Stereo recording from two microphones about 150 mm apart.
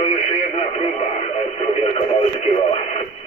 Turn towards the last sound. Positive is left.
turn(degrees=45)  # may be behind; listen again after turning